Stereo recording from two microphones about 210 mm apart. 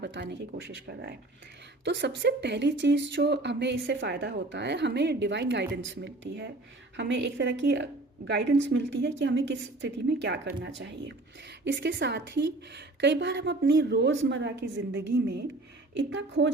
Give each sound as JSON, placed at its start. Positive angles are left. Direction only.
{"t": 0.0, "sound": "a woman's voice", "side_deg": -55}